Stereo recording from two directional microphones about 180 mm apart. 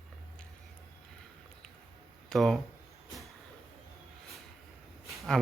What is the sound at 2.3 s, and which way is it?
Speech, centre (ahead or behind).